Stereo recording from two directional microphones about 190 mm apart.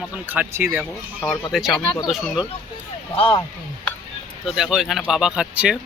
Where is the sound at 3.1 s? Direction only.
30° left (ahead or behind).